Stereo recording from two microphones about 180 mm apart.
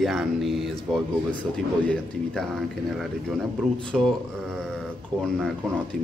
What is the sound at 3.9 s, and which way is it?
Speech, centre (ahead or behind).